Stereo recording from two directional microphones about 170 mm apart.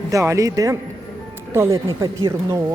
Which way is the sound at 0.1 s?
20° right (ahead or behind).